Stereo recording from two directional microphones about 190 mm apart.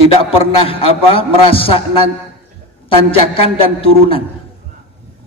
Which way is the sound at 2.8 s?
30° left (ahead or behind).